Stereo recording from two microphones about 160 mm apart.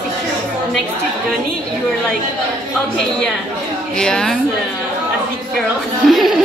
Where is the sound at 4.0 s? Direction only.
5° left (ahead or behind).